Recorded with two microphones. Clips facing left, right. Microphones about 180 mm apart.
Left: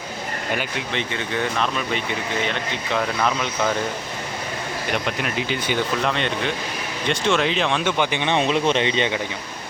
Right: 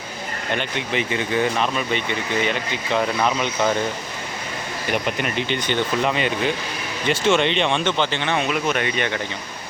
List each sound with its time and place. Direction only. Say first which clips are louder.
0.5 s speech: right 2 dB; 5° left (ahead or behind)
0.9 s speech: right 5 dB; 5° right (ahead or behind)
5.0 s speech: right 1 dB; centre (ahead or behind)
7.9 s speech: left 1 dB; 15° left (ahead or behind)
8.4 s speech: left 4 dB; 30° left (ahead or behind)